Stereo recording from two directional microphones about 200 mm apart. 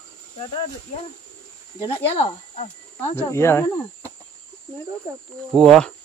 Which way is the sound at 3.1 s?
15° left (ahead or behind).